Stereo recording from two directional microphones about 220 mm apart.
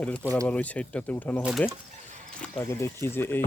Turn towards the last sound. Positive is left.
turn(degrees=10)  # may be behind; listen again after turning